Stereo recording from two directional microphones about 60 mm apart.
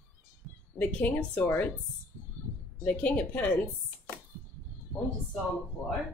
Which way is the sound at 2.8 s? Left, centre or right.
Left.